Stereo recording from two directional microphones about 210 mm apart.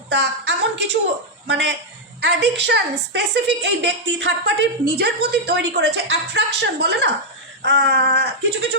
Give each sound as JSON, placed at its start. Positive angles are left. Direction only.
{"t": 0.1, "sound": "a woman's voice", "side_deg": -55}